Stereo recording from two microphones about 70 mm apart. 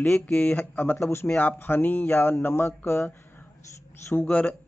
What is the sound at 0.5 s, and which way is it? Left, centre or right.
Speech, left.